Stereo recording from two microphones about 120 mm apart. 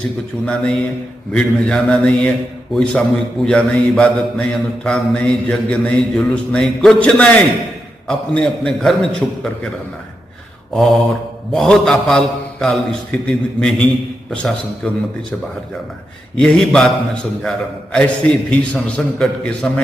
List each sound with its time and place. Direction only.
0.5 s a man's voice: 5° left (ahead or behind)
10.7 s mantra: centre (ahead or behind)
11.5 s a man's voice: 5° left (ahead or behind)
16.3 s a man's voice: 5° left (ahead or behind)